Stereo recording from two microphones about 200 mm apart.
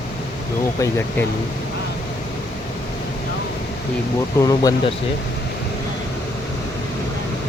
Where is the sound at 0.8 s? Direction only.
10° left (ahead or behind).